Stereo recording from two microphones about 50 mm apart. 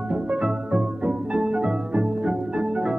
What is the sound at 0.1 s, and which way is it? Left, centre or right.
Music, right.